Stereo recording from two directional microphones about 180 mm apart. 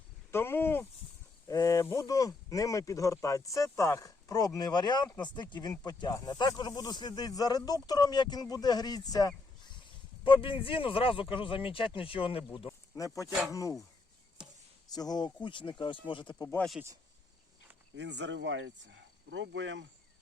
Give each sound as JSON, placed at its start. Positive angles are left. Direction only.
{"t": 0.3, "sound": "speech", "side_deg": 15}
{"t": 13.2, "sound": "speech", "side_deg": 0}
{"t": 13.5, "sound": "speech", "side_deg": 20}
{"t": 14.8, "sound": "speech", "side_deg": 20}
{"t": 16.6, "sound": "speech", "side_deg": 0}
{"t": 17.9, "sound": "speech", "side_deg": -75}